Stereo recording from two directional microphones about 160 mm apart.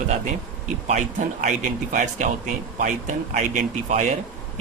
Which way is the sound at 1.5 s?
50° right (ahead or behind).